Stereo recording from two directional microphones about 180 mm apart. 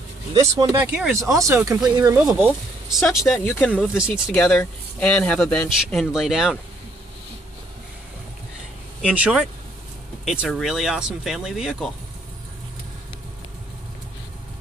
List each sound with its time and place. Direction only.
0.3 s speech: 20° right (ahead or behind)
0.8 s speech: 5° right (ahead or behind)
3.3 s speech: 10° left (ahead or behind)
3.8 s a man's voice: 5° right (ahead or behind)
9.1 s a man's voice: 5° right (ahead or behind)